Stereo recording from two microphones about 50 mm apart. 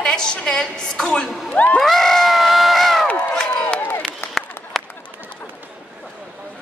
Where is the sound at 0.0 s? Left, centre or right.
Centre.